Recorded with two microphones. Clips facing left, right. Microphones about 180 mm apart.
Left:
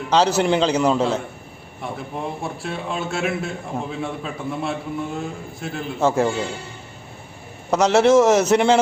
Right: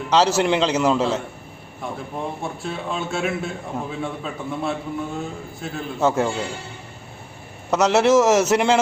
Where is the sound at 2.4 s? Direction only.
Centre (ahead or behind).